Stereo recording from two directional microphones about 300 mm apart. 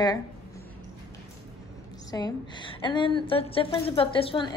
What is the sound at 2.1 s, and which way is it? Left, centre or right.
A woman's voice, centre.